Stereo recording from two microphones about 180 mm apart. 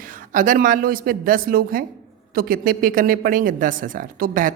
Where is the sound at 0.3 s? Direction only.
45° right (ahead or behind).